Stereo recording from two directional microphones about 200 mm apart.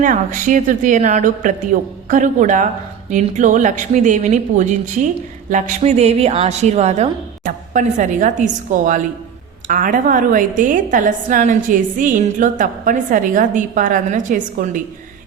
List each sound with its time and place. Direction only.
0.0 s a woman's voice: 40° right (ahead or behind)